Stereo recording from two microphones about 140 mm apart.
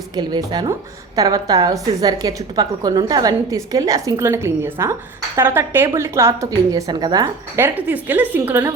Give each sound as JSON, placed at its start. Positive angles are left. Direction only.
{"t": 0.2, "sound": "a woman's voice", "side_deg": -30}